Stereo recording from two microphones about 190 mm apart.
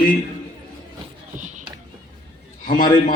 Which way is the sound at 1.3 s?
40° right (ahead or behind).